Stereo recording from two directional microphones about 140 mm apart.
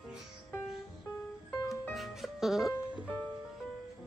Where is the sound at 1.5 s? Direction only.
20° left (ahead or behind).